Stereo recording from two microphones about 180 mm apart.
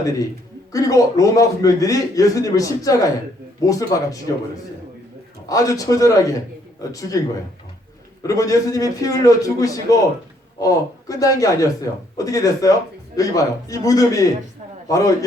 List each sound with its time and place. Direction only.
0.7 s a man's voice: 20° left (ahead or behind)
5.5 s a man's voice: 20° left (ahead or behind)
8.3 s a man's voice: 20° left (ahead or behind)